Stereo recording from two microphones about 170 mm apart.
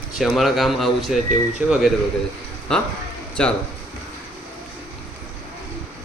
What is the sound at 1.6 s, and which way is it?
Speech, 10° right (ahead or behind).